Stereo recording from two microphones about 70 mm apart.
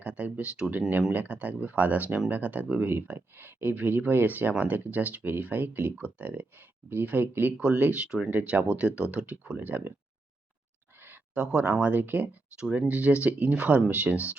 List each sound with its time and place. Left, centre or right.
0.0 s speech: centre
0.8 s speech: right
8.3 s speech: right
11.3 s speech: right